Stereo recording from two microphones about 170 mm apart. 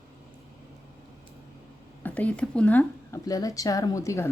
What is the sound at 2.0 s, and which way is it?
Speech, 10° left (ahead or behind).